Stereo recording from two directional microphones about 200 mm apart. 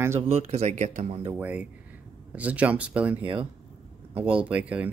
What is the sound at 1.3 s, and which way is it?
Speech, 10° right (ahead or behind).